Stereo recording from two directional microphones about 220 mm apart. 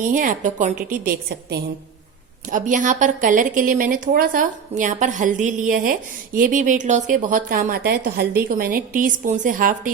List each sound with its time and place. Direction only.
0.0 s a woman's voice: 35° right (ahead or behind)
2.5 s a woman's voice: 35° right (ahead or behind)